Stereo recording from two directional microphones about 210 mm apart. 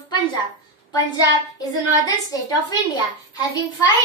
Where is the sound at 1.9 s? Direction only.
15° left (ahead or behind).